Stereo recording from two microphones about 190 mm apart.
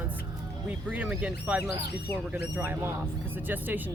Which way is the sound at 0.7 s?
5° right (ahead or behind).